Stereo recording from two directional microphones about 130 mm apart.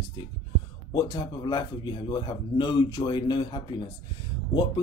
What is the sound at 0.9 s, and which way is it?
Speech, 35° left (ahead or behind).